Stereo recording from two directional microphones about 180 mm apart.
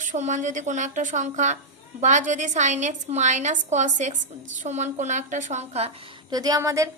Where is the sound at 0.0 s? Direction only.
45° right (ahead or behind).